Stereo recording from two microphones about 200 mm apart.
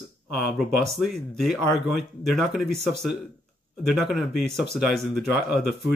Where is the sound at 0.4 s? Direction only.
Centre (ahead or behind).